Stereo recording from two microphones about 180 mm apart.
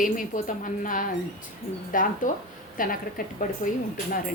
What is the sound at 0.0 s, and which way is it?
Speech, 45° left (ahead or behind).